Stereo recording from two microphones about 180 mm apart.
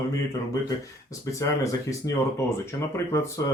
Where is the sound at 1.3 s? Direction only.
20° left (ahead or behind).